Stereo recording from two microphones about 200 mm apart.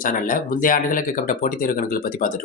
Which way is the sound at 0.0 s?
45° left (ahead or behind).